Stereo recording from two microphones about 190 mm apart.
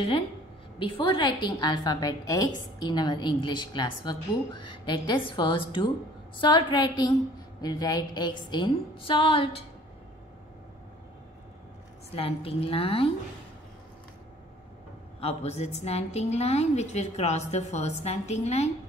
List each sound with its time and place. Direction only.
0.7 s a woman's voice: 25° left (ahead or behind)
12.2 s a woman's voice: 30° left (ahead or behind)
15.1 s a woman's voice: 35° left (ahead or behind)